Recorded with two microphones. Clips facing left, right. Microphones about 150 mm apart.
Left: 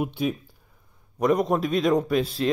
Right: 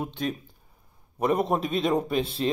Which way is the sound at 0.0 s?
10° left (ahead or behind).